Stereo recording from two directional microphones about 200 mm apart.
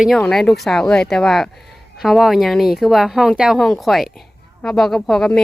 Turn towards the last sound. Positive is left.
turn(degrees=0)  # may be behind; listen again after turning